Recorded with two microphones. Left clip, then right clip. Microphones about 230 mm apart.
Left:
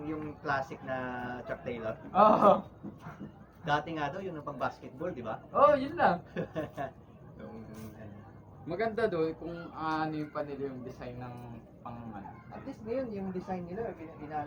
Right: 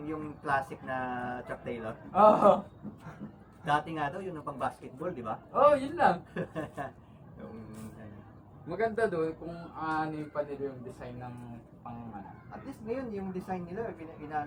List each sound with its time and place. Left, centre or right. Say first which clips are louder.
0.0 s speech: even; right
2.1 s a sound: right 1 dB; centre
3.7 s speech: right 2 dB; right
5.5 s a man's voice: even; centre
6.3 s speech: even; right
8.6 s a man's voice: right 1 dB; centre
9.7 s a sound: even; centre
12.5 s speech: even; right